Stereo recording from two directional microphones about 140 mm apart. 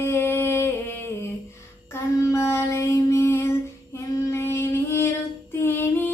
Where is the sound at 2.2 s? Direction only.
20° left (ahead or behind).